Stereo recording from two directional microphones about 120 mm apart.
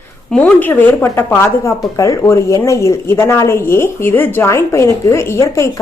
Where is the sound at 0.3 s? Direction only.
10° left (ahead or behind).